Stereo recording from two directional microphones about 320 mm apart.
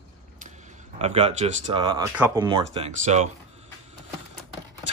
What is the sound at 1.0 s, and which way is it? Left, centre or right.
Speech, centre.